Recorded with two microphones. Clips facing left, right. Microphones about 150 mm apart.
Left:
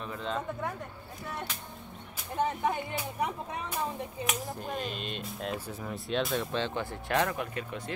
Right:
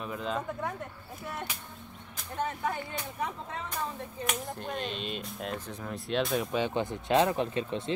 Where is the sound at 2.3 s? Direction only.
20° left (ahead or behind).